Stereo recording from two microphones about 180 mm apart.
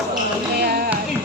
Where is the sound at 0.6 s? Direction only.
55° right (ahead or behind).